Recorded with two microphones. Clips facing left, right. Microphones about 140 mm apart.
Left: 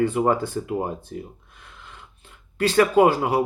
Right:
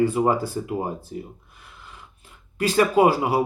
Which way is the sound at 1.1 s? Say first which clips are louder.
Even; 55° left (ahead or behind).